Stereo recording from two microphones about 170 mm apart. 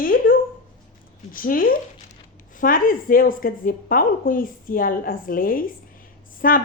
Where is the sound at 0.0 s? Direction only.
55° left (ahead or behind).